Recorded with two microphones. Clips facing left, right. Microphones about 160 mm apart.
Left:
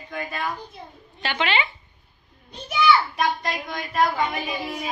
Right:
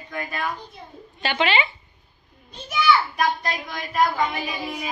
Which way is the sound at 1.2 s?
10° right (ahead or behind).